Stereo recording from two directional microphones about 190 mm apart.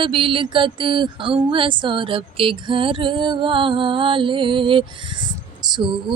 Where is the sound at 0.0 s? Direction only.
25° right (ahead or behind).